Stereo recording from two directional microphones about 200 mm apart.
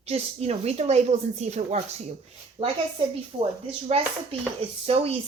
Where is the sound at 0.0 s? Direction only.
30° right (ahead or behind).